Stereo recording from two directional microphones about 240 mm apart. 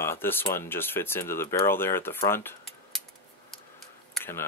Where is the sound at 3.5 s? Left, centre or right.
Centre.